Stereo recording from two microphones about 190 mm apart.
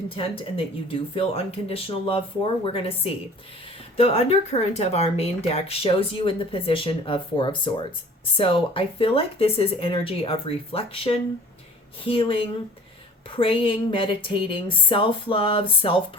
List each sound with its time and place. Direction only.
0.1 s speech: 30° left (ahead or behind)